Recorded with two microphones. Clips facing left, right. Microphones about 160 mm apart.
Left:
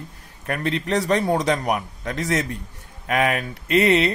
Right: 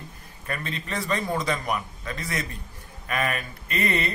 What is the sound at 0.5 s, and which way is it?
A man's voice, 75° left (ahead or behind).